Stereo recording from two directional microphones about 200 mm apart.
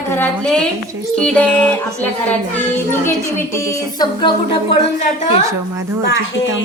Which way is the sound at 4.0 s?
25° left (ahead or behind).